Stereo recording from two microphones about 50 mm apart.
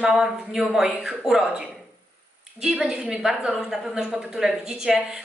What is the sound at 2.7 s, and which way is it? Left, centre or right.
A woman's voice, centre.